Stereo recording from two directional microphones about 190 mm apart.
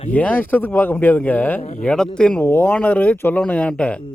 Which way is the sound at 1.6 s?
40° left (ahead or behind).